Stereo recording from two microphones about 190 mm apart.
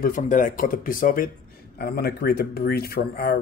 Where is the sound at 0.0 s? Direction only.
40° left (ahead or behind).